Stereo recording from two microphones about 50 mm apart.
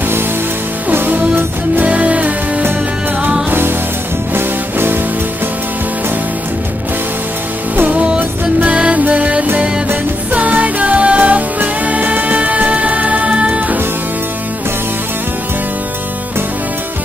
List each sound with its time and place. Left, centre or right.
0.9 s music: right
3.4 s music: right
7.7 s music: right